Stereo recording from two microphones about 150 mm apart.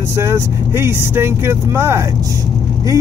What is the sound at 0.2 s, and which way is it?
Speech, 15° right (ahead or behind).